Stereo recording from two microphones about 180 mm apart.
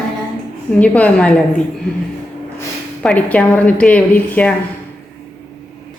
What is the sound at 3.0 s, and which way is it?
A woman's voice, 5° left (ahead or behind).